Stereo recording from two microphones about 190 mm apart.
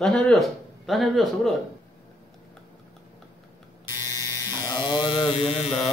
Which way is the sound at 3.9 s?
15° left (ahead or behind).